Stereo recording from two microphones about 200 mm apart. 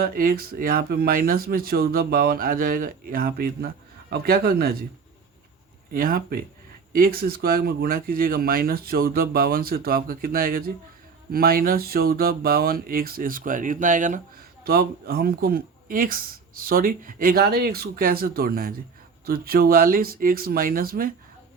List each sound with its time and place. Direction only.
0.0 s speech: 45° right (ahead or behind)
5.9 s speech: 45° right (ahead or behind)